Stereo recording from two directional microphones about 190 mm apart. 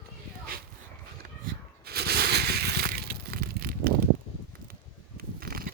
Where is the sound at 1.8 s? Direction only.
55° right (ahead or behind).